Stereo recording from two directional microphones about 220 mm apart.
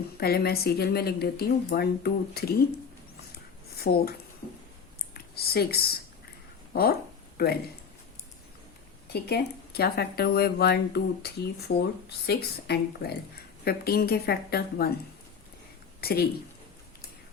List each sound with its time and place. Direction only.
0.2 s speech: 45° left (ahead or behind)
3.3 s a sound: 45° left (ahead or behind)
5.1 s speech: 45° left (ahead or behind)
7.3 s speech: 45° left (ahead or behind)
9.1 s speech: 45° left (ahead or behind)
16.0 s a woman's voice: 45° left (ahead or behind)